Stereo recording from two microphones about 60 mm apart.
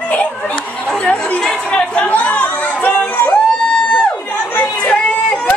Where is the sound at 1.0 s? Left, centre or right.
Left.